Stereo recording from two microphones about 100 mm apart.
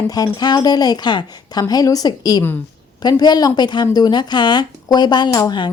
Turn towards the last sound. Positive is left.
turn(degrees=40)  # may be behind; listen again after turning